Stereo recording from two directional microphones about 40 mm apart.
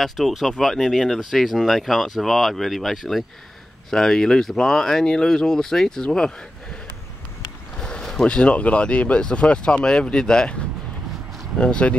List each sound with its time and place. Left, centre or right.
0.0 s speech: centre
7.8 s boat: centre
8.3 s speech: left
11.6 s speech: left